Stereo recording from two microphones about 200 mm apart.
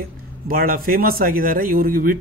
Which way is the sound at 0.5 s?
45° right (ahead or behind).